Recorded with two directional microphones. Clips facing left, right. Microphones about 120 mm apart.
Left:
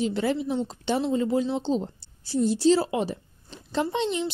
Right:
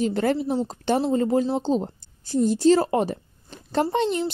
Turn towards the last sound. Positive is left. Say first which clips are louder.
# right 3 dB
turn(degrees=-45)  # may be behind; listen again after turning